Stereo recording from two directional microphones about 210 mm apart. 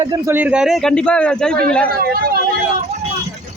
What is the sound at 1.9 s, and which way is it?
Speech, 45° right (ahead or behind).